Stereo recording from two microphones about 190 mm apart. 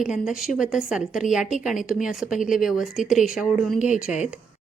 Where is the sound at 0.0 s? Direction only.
5° right (ahead or behind).